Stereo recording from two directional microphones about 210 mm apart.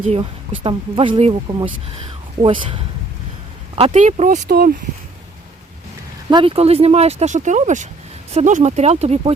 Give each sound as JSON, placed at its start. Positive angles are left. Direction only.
{"t": 0.6, "sound": "speech", "side_deg": -25}
{"t": 6.3, "sound": "speech", "side_deg": -25}